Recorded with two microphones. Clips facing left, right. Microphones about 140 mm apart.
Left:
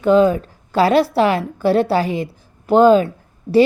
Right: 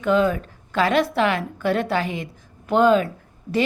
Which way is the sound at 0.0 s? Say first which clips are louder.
Left 6 dB; 35° left (ahead or behind).